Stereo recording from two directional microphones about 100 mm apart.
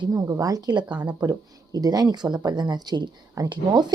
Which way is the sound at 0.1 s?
35° right (ahead or behind).